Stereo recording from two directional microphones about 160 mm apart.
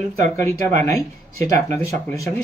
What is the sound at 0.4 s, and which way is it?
Speech, 15° left (ahead or behind).